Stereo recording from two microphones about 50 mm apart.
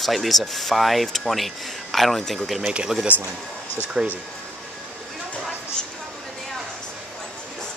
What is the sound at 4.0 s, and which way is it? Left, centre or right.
Speech, centre.